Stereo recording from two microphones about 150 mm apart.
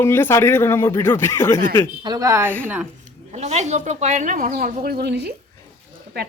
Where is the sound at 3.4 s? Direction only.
50° right (ahead or behind).